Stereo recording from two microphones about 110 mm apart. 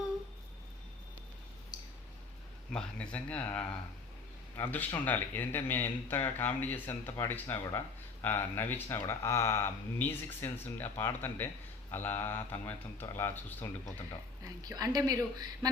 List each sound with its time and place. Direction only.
2.7 s speech: 10° left (ahead or behind)
14.4 s speech: 35° right (ahead or behind)